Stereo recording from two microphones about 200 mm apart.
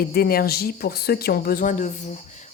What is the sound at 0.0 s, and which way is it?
Speech, 50° left (ahead or behind).